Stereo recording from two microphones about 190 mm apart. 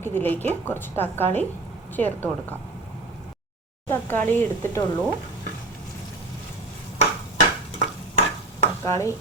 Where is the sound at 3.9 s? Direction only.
10° left (ahead or behind).